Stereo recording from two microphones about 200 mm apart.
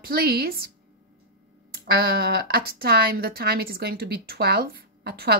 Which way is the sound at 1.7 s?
50° right (ahead or behind).